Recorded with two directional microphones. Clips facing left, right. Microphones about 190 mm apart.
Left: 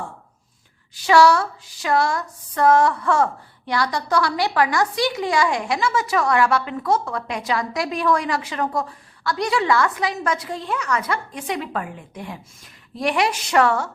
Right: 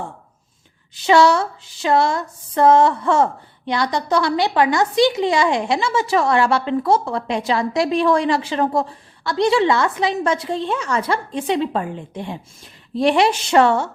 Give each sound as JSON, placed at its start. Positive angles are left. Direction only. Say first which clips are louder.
{"t": 0.9, "sound": "a woman's voice", "louder": "right 1 dB", "side_deg": -20}